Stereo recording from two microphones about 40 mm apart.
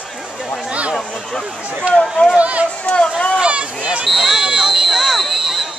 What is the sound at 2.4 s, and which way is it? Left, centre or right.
Run, right.